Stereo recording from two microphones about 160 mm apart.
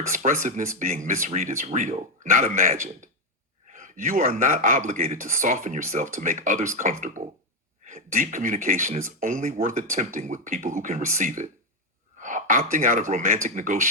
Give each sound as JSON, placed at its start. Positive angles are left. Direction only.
{"t": 0.1, "sound": "speech", "side_deg": -55}
{"t": 2.4, "sound": "a man's voice", "side_deg": -55}
{"t": 3.8, "sound": "a man's voice", "side_deg": -55}
{"t": 5.4, "sound": "speech", "side_deg": -45}